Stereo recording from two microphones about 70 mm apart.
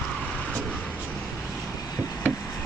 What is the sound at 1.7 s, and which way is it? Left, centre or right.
Vehicle, left.